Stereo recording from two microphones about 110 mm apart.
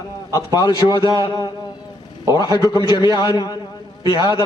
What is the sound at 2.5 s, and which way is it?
A man's voice, 35° left (ahead or behind).